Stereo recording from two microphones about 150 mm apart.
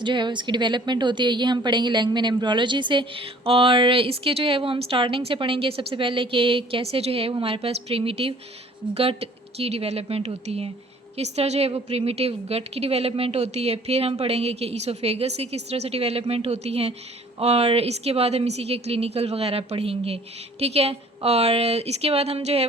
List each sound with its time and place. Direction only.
0.0 s a woman's voice: 30° right (ahead or behind)